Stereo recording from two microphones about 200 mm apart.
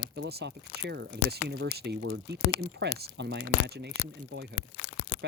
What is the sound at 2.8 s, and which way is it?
Speech, 60° right (ahead or behind).